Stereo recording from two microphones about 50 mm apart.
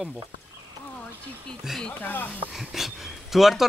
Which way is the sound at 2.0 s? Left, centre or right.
Left.